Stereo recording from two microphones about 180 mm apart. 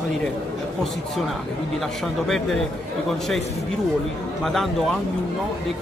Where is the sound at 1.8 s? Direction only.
Centre (ahead or behind).